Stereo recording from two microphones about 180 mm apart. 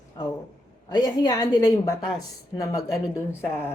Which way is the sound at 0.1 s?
25° left (ahead or behind).